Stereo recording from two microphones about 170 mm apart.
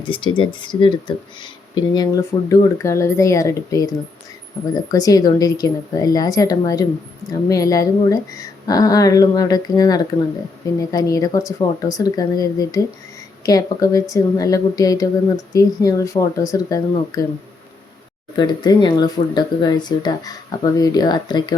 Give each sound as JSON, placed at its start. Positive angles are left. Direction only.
{"t": 0.0, "sound": "speech", "side_deg": 30}
{"t": 18.3, "sound": "speech", "side_deg": 25}